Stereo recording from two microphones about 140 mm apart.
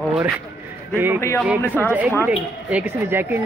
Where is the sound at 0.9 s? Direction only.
15° right (ahead or behind).